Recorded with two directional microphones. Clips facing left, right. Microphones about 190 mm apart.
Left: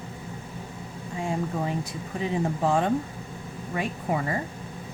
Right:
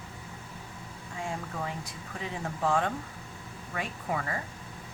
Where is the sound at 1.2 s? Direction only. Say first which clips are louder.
Left 8 dB; 20° left (ahead or behind).